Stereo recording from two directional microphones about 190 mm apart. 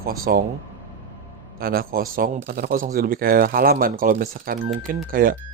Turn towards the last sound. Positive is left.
turn(degrees=-50)  # may be behind; listen again after turning